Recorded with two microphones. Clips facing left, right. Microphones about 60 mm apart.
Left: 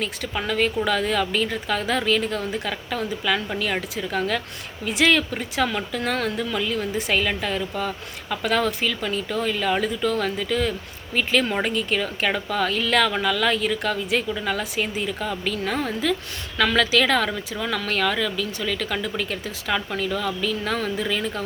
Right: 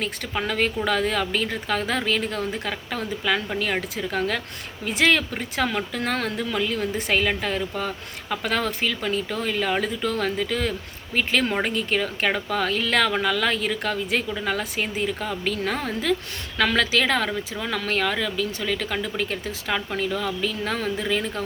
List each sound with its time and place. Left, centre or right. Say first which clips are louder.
0.0 s speech: even; right